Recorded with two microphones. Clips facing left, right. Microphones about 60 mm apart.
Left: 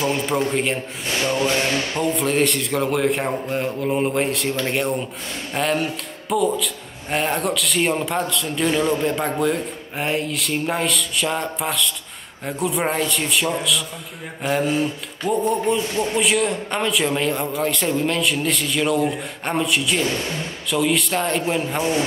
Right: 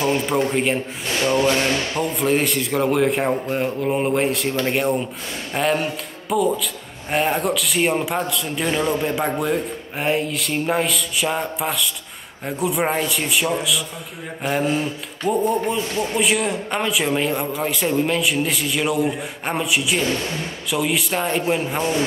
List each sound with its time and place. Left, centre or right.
0.3 s a man's voice: centre
1.3 s music: right
2.0 s a man's voice: centre